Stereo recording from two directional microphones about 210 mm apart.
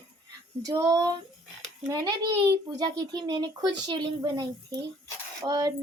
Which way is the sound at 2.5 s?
20° right (ahead or behind).